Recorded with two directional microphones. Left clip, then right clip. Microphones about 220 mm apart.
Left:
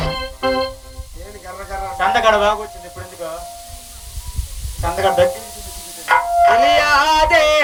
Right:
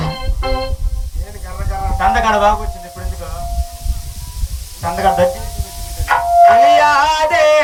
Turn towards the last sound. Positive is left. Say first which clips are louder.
# right 1 dB
turn(degrees=40)  # may be behind; listen again after turning